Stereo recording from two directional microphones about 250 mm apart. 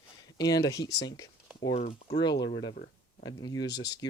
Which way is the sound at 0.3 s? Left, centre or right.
Centre.